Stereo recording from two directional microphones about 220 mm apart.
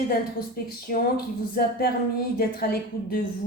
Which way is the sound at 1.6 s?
40° left (ahead or behind).